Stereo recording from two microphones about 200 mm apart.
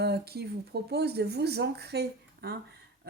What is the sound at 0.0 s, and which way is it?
Speech, 55° right (ahead or behind).